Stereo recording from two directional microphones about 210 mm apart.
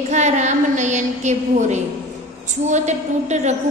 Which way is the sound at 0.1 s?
35° right (ahead or behind).